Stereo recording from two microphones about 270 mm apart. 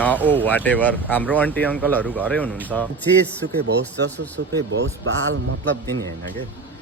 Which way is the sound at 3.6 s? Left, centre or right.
Right.